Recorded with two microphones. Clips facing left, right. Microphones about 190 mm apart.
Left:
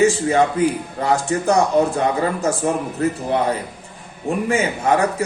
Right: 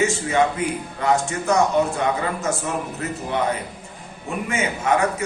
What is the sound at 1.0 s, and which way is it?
Speech, 35° left (ahead or behind).